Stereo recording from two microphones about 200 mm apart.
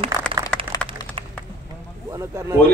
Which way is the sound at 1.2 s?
25° right (ahead or behind).